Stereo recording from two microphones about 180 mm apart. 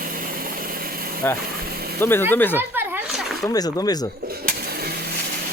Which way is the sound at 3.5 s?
20° left (ahead or behind).